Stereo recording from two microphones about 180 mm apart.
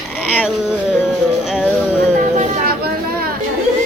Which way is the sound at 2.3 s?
40° right (ahead or behind).